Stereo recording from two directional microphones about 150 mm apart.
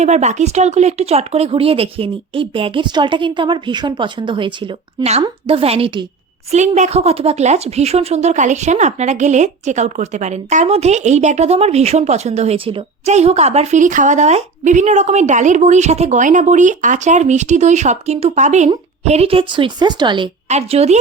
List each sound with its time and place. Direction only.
0.0 s speech: 50° right (ahead or behind)
6.5 s speech: 50° right (ahead or behind); by 20.3 s 30° right (ahead or behind)
20.5 s speech: 45° right (ahead or behind)